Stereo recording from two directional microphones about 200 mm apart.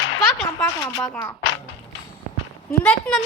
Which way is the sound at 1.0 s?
10° left (ahead or behind).